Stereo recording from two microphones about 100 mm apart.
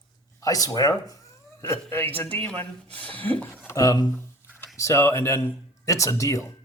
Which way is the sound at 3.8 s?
40° left (ahead or behind).